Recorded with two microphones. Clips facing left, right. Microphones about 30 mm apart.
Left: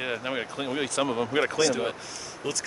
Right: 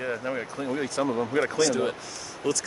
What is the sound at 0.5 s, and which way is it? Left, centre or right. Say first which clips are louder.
Speech: left 1 dB; left.